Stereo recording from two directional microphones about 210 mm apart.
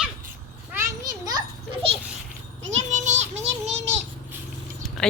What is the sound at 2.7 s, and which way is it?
Music, 35° right (ahead or behind).